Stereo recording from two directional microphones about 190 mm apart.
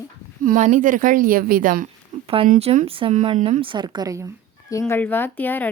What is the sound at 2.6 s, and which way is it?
Speech, 30° right (ahead or behind).